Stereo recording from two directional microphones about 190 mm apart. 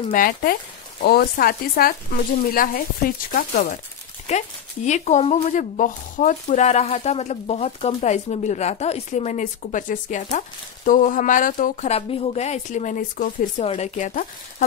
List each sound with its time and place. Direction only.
0.1 s speech: 45° left (ahead or behind)
4.3 s speech: 35° left (ahead or behind)